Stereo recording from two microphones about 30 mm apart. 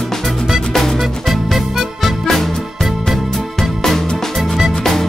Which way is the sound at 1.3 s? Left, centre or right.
Centre.